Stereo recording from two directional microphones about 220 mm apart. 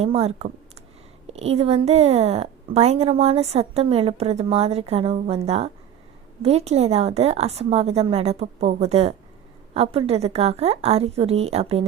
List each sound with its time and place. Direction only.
0.0 s a woman's voice: 30° right (ahead or behind)